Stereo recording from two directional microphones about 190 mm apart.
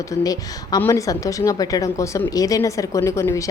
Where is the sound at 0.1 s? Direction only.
20° left (ahead or behind).